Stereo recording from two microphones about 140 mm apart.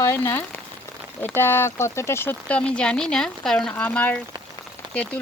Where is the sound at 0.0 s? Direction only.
15° left (ahead or behind).